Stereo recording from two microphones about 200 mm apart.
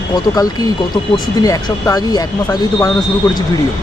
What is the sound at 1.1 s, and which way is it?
Speech, 20° left (ahead or behind).